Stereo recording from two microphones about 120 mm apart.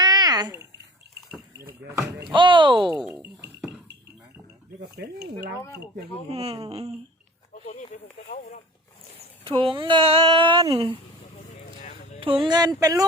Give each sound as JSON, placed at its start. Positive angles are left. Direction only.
{"t": 0.0, "sound": "babbling", "side_deg": -35}
{"t": 2.3, "sound": "speech", "side_deg": -45}
{"t": 6.3, "sound": "speech", "side_deg": -55}
{"t": 7.5, "sound": "speech", "side_deg": 70}
{"t": 8.3, "sound": "speech", "side_deg": 90}
{"t": 9.4, "sound": "speech", "side_deg": -45}
{"t": 11.3, "sound": "a sound", "side_deg": 70}
{"t": 12.2, "sound": "speech", "side_deg": -45}